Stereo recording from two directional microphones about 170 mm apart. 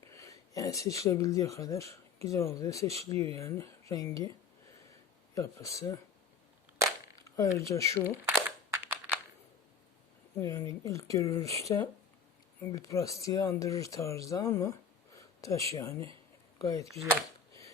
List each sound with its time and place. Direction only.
0.0 s speech: 20° left (ahead or behind)
5.3 s speech: 20° left (ahead or behind)
7.3 s speech: 20° left (ahead or behind)
8.2 s a sound: 10° right (ahead or behind)
10.3 s speech: 20° left (ahead or behind)
16.9 s speech: centre (ahead or behind)